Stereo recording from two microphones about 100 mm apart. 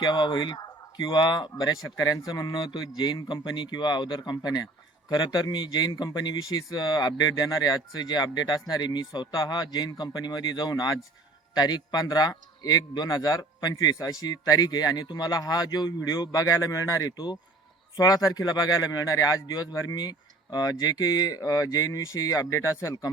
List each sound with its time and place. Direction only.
0.0 s a man's voice: 50° left (ahead or behind); by 23.1 s 30° left (ahead or behind)